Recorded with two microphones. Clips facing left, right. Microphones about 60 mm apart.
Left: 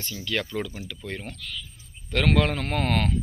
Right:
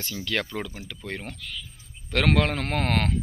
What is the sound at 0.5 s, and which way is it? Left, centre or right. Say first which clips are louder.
A man's voice: left 2 dB; right.